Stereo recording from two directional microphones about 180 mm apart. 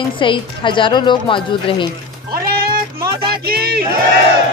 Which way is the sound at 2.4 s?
55° right (ahead or behind).